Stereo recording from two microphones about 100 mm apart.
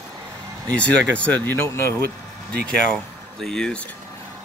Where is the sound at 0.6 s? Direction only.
10° left (ahead or behind).